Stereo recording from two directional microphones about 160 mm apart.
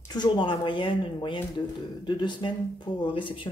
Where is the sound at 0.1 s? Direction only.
30° left (ahead or behind).